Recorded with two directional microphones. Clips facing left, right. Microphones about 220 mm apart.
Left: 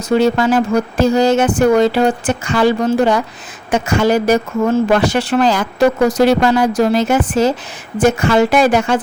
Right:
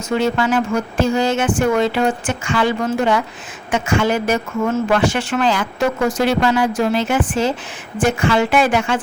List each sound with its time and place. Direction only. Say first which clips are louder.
0.1 s speech: left 5 dB; 35° left (ahead or behind)